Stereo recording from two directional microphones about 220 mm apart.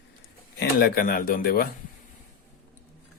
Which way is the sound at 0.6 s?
45° left (ahead or behind).